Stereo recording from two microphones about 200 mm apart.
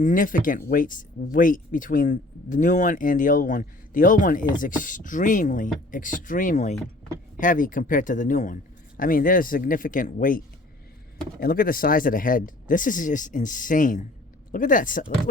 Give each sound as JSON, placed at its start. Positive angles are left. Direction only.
{"t": 0.0, "sound": "speech", "side_deg": 40}